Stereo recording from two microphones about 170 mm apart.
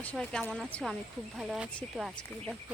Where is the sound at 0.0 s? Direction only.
10° left (ahead or behind).